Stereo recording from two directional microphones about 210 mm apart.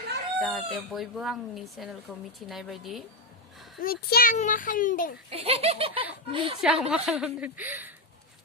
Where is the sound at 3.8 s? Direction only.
45° left (ahead or behind).